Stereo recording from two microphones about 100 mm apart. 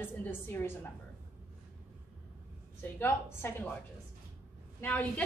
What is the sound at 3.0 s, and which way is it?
Speech, 25° left (ahead or behind).